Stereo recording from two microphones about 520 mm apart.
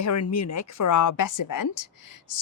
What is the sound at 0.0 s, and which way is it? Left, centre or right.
Speech, left.